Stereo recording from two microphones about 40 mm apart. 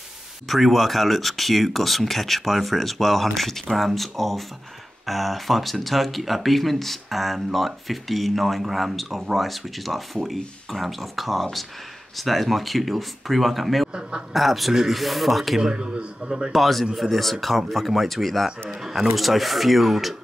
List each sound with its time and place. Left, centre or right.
0.5 s speech: centre
14.7 s a man's voice: centre
15.0 s speech: centre
15.6 s a man's voice: right
16.5 s speech: centre
18.8 s speech: centre